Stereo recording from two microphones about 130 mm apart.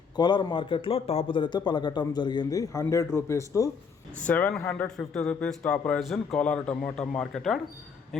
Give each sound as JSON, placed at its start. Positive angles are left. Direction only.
{"t": 0.2, "sound": "a man's voice", "side_deg": 35}
{"t": 4.3, "sound": "a man's voice", "side_deg": 15}